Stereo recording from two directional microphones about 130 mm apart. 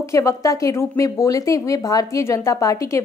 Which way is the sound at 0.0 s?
20° left (ahead or behind).